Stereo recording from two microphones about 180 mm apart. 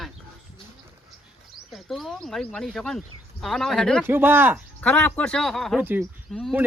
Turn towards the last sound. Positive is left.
turn(degrees=5)  # may be behind; listen again after turning